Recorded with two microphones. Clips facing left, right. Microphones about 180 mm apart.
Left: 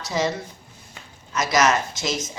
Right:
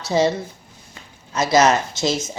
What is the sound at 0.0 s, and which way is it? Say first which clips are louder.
A woman's voice: right 6 dB; 30° right (ahead or behind).